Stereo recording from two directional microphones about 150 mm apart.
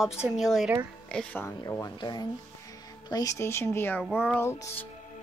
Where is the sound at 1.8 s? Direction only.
30° left (ahead or behind).